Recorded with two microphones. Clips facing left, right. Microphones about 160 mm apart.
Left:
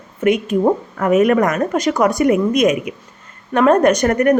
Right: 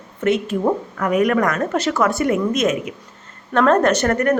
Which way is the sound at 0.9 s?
25° left (ahead or behind).